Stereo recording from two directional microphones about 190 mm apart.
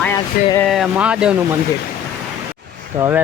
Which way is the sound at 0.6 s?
Centre (ahead or behind).